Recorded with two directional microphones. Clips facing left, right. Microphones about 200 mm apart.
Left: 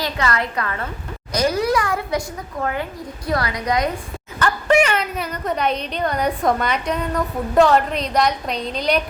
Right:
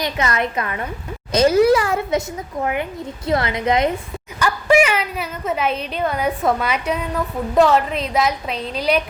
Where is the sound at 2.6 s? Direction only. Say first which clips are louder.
Right 2 dB; 15° right (ahead or behind).